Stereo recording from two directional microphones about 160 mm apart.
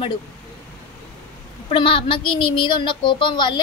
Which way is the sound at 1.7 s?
35° left (ahead or behind).